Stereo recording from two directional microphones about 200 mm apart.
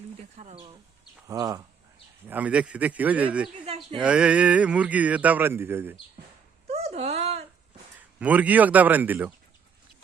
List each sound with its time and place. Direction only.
0.3 s speech: 35° right (ahead or behind)
1.3 s speech: 15° right (ahead or behind)
3.6 s a sound: 25° right (ahead or behind)
4.0 s speech: 5° right (ahead or behind)
6.7 s a sound: 30° right (ahead or behind)
8.2 s speech: 5° right (ahead or behind)